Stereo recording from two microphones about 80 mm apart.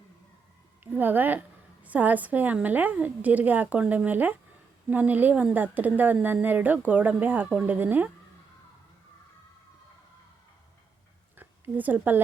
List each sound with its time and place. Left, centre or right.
0.9 s a woman's voice: right
11.3 s speech: right